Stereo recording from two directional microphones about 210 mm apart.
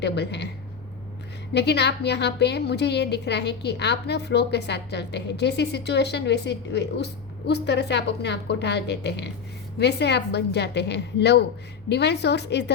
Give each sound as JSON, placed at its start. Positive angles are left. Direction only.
{"t": 0.0, "sound": "a woman's voice", "side_deg": 55}
{"t": 1.5, "sound": "a woman's voice", "side_deg": 55}